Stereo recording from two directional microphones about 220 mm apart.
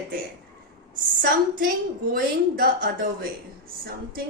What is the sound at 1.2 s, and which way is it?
A woman's voice, 40° right (ahead or behind).